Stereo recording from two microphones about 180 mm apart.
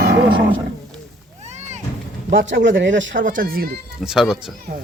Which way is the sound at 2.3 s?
90° right.